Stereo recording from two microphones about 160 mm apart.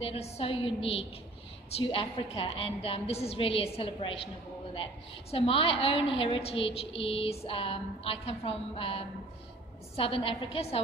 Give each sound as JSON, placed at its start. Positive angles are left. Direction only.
{"t": 0.0, "sound": "a woman's voice", "side_deg": 40}
{"t": 5.3, "sound": "a woman's voice", "side_deg": 35}